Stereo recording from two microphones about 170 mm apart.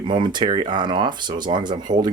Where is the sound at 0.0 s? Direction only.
25° right (ahead or behind).